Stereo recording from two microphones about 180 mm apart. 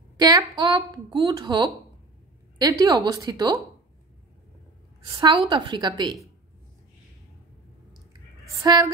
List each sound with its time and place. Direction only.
0.2 s a woman's voice: 20° right (ahead or behind)
5.0 s a woman's voice: 25° right (ahead or behind)
8.6 s a woman's voice: 20° right (ahead or behind)